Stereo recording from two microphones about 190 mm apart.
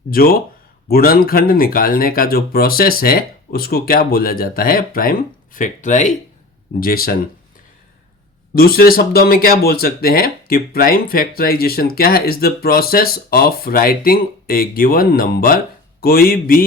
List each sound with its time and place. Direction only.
0.1 s speech: 50° left (ahead or behind)
6.7 s speech: 50° left (ahead or behind)
8.5 s speech: 50° left (ahead or behind)